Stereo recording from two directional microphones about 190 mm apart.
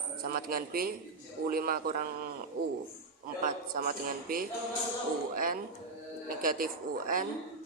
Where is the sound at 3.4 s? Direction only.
50° right (ahead or behind).